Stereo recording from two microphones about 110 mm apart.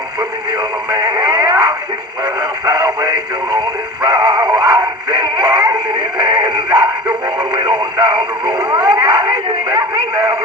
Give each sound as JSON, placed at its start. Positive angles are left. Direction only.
{"t": 0.9, "sound": "radio", "side_deg": -35}
{"t": 4.0, "sound": "synthetic singing", "side_deg": -35}